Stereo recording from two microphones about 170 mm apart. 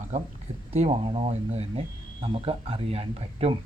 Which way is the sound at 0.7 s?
40° right (ahead or behind).